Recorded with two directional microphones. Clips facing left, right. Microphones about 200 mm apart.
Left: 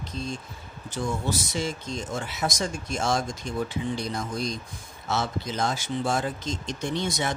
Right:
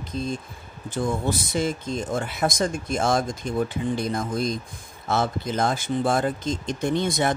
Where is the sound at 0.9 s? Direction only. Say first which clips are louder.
Right 4 dB; 55° right (ahead or behind).